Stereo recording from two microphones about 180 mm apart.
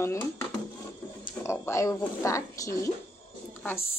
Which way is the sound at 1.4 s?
15° left (ahead or behind).